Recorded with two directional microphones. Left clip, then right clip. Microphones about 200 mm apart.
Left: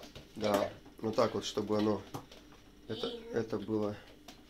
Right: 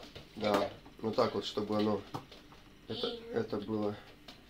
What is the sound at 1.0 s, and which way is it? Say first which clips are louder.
Speech: even; 25° left (ahead or behind).